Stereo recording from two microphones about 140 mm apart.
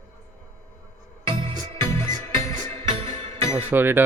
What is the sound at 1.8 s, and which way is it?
Music, 20° left (ahead or behind).